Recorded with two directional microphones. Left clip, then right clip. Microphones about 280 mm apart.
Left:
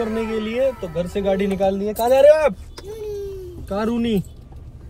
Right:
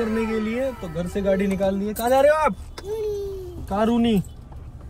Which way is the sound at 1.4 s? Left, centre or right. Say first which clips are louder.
Left 3 dB; left.